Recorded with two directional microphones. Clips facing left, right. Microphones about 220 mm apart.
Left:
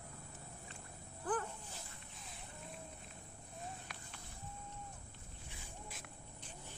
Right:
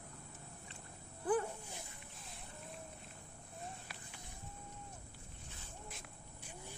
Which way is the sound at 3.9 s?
5° right (ahead or behind).